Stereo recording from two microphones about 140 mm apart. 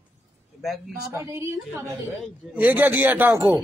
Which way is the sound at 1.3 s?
20° right (ahead or behind).